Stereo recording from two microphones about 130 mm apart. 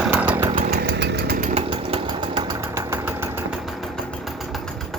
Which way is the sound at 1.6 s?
45° right (ahead or behind).